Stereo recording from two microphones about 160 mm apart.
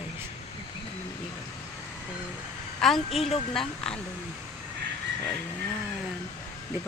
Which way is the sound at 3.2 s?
40° left (ahead or behind).